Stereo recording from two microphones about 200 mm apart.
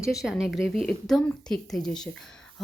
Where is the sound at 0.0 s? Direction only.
Centre (ahead or behind).